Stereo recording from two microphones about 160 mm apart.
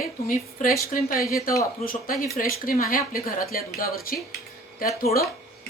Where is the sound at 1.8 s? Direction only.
60° left (ahead or behind).